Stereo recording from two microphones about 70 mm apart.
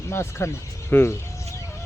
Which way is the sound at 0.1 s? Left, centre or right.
Left.